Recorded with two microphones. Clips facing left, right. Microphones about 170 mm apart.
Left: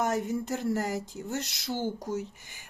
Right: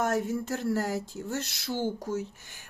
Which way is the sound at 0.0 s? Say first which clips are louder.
Right 1 dB; 15° left (ahead or behind).